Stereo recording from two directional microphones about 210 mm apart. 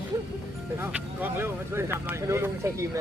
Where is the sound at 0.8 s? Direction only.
10° right (ahead or behind).